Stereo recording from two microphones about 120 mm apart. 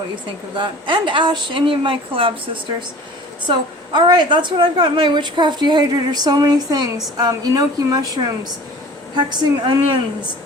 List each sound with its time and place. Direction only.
0.5 s speech: 40° right (ahead or behind)
3.4 s a woman's voice: 40° right (ahead or behind)